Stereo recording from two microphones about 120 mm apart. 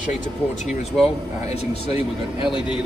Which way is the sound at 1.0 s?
60° left (ahead or behind).